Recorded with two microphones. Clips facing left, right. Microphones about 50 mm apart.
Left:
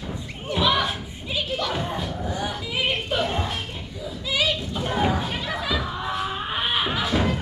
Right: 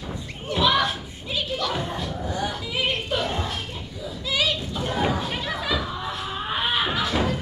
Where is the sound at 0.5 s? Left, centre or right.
Centre.